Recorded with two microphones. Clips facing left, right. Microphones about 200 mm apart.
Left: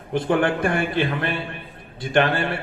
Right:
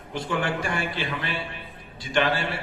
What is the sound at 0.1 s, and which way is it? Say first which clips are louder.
A man's voice: left 7 dB; 55° left (ahead or behind).